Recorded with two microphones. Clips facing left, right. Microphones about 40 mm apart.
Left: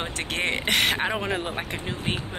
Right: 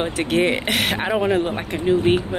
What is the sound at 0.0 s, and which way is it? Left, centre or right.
Speech, centre.